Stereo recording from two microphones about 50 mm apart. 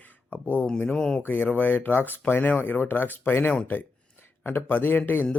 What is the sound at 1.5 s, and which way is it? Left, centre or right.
Speech, left.